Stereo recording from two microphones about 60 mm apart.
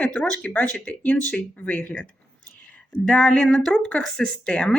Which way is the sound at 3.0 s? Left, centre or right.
Centre.